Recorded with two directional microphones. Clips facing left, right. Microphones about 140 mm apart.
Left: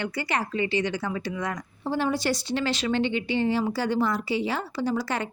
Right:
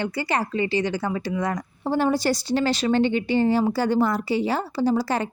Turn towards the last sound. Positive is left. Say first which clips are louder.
# right 5 dB
turn(degrees=-35)  # may be behind; listen again after turning